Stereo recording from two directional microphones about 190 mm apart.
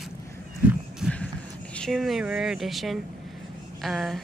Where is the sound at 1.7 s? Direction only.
Centre (ahead or behind).